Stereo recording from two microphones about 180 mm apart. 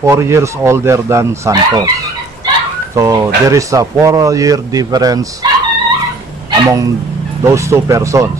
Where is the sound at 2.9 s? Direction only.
15° right (ahead or behind).